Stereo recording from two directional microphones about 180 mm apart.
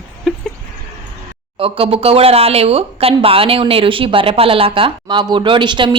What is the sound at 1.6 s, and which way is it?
Speech, 30° right (ahead or behind).